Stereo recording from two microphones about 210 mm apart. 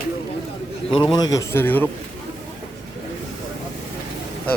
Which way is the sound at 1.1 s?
15° left (ahead or behind).